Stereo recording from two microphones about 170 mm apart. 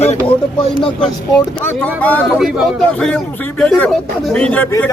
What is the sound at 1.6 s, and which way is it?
A man's voice, 10° left (ahead or behind).